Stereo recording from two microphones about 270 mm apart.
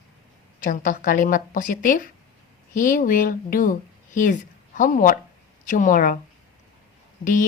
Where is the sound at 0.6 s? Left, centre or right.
Left.